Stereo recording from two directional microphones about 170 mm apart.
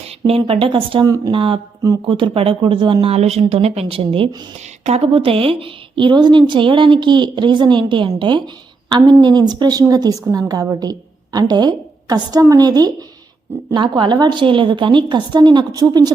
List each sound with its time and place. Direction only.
0.3 s a woman's voice: 35° right (ahead or behind)